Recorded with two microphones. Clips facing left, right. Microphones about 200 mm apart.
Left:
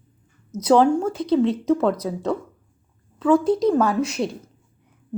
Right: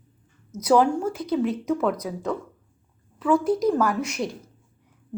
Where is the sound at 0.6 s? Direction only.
25° left (ahead or behind).